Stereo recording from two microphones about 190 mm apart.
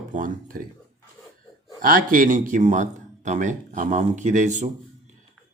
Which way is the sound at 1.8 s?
45° right (ahead or behind).